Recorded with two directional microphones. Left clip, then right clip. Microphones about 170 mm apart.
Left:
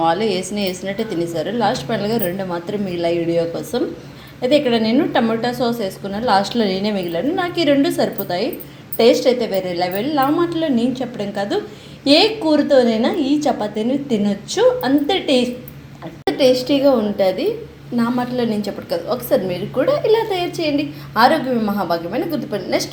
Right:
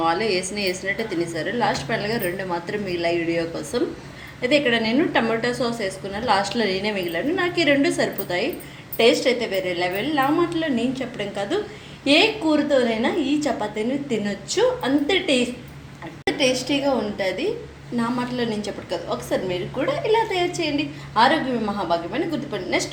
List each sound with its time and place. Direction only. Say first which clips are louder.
0.0 s a woman's voice: left 4 dB; 30° left (ahead or behind)